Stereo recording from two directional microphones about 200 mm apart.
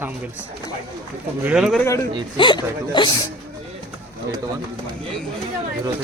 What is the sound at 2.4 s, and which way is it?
Speech, 25° left (ahead or behind).